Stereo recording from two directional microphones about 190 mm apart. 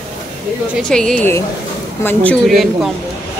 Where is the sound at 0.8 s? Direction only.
5° left (ahead or behind).